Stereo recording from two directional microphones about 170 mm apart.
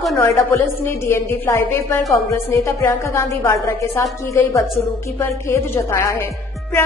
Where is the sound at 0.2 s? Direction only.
15° left (ahead or behind).